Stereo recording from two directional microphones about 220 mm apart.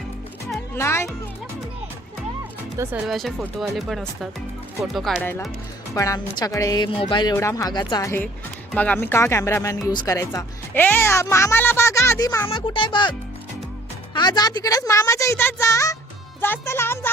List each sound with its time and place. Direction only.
0.8 s speech: 10° left (ahead or behind)
2.7 s speech: 10° right (ahead or behind)
3.1 s speech: centre (ahead or behind)
12.5 s speech: 20° left (ahead or behind)